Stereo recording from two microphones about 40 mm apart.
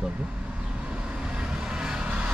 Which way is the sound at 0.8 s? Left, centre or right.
Right.